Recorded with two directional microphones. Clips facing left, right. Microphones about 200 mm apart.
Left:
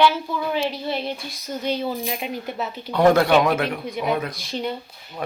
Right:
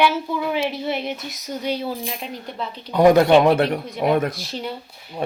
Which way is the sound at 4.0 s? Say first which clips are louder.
Right 5 dB; 45° right (ahead or behind).